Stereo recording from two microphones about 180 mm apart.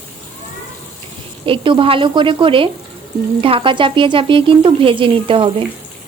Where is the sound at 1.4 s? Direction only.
30° right (ahead or behind).